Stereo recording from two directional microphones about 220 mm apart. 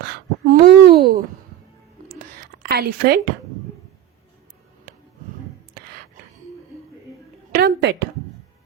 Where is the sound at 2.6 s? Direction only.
45° right (ahead or behind).